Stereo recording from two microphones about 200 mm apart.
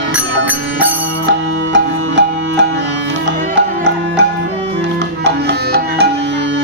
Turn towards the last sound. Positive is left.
turn(degrees=-55)  # may be behind; listen again after turning